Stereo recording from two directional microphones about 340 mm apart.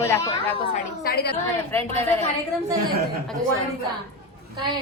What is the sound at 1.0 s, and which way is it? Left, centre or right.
Speech, left.